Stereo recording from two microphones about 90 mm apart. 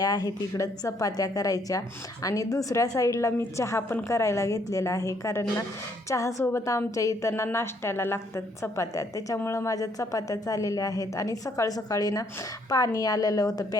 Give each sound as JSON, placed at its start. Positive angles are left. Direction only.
{"t": 0.0, "sound": "a woman's voice", "side_deg": 45}